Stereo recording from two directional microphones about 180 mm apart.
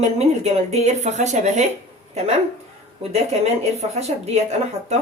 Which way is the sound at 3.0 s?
35° right (ahead or behind).